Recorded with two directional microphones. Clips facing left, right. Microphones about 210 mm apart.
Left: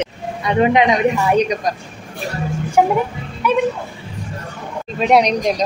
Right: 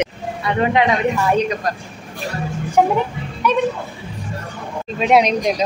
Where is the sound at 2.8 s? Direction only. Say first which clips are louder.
Left 1 dB; 10° left (ahead or behind).